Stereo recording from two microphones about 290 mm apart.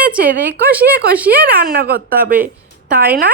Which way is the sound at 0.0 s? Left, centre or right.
Right.